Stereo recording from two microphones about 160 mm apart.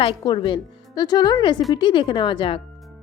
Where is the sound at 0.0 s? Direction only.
35° left (ahead or behind).